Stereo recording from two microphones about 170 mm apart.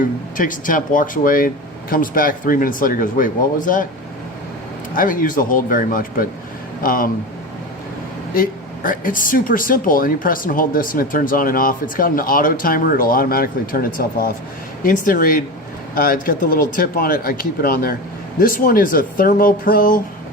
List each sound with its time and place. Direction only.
0.0 s speech: 50° left (ahead or behind)
4.9 s speech: 55° left (ahead or behind)
8.3 s speech: 55° left (ahead or behind)